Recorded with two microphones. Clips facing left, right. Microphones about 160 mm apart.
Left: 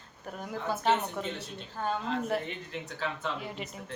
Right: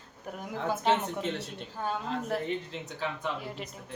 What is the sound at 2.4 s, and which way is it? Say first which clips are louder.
Speech: right 5 dB; 30° right (ahead or behind).